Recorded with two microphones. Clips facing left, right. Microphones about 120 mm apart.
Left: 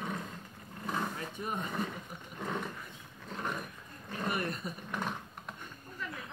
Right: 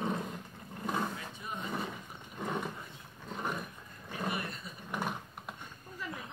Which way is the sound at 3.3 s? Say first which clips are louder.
Right 1 dB; 5° right (ahead or behind).